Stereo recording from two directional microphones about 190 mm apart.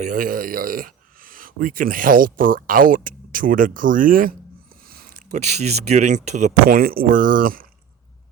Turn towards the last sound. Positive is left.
turn(degrees=-50)  # may be behind; listen again after turning